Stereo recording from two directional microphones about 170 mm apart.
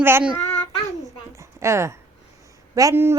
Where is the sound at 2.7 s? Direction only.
20° right (ahead or behind).